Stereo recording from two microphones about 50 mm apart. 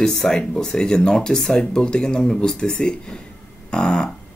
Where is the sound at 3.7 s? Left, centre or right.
Centre.